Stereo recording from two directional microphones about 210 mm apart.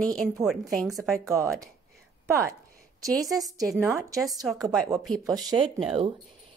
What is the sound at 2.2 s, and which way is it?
Speech, 15° right (ahead or behind).